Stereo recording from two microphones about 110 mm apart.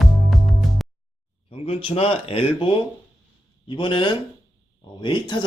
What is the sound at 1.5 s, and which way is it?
Speech, 60° left (ahead or behind).